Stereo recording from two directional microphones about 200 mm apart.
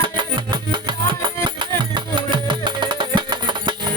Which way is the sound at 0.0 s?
25° right (ahead or behind).